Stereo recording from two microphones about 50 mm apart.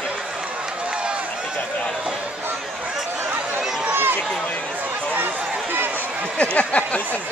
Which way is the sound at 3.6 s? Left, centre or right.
Centre.